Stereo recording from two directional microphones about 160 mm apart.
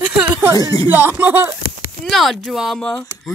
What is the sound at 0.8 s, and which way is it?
Music, 15° right (ahead or behind).